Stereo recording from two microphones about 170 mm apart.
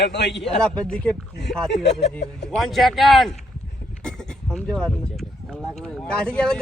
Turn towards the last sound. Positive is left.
turn(degrees=5)  # may be behind; listen again after turning